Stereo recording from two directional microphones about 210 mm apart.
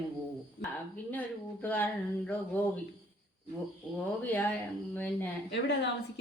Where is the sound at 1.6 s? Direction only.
10° left (ahead or behind).